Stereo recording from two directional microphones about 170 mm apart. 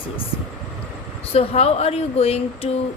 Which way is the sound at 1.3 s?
35° left (ahead or behind).